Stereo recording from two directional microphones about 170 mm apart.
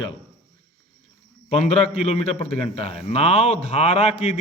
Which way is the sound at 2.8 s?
35° left (ahead or behind).